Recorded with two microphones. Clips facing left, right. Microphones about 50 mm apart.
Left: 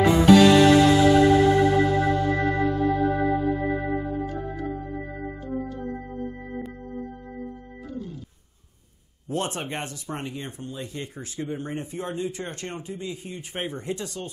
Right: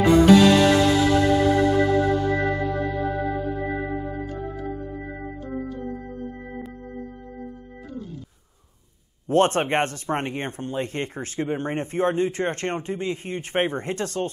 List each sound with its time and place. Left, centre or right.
0.0 s music: centre
2.8 s organ: centre
5.7 s music: centre
9.3 s speech: right